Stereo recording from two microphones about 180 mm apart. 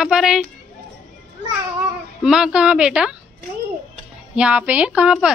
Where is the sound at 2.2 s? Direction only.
5° right (ahead or behind).